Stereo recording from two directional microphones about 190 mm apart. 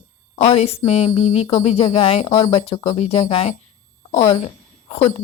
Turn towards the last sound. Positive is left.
turn(degrees=30)  # may be behind; listen again after turning